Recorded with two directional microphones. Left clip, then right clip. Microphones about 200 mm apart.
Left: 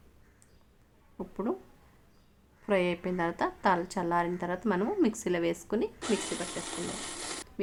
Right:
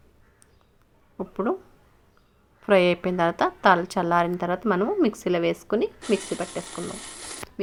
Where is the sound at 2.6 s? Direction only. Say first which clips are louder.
Right 9 dB; 20° right (ahead or behind).